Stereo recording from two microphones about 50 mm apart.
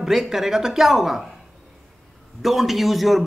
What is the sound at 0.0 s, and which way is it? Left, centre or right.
A man's voice, centre.